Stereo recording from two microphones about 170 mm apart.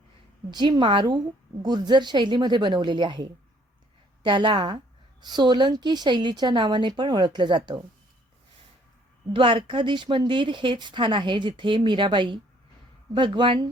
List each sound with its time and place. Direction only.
0.5 s speech: 25° right (ahead or behind)
9.3 s speech: 30° right (ahead or behind)